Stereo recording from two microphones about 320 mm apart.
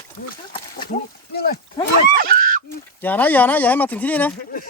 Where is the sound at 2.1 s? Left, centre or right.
Right.